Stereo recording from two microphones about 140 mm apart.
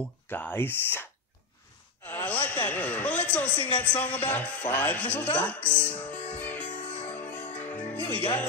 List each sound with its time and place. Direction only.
0.3 s speech: 15° left (ahead or behind)
2.0 s a sound: 10° left (ahead or behind)
3.8 s speech: 10° left (ahead or behind)
6.7 s music: 10° left (ahead or behind)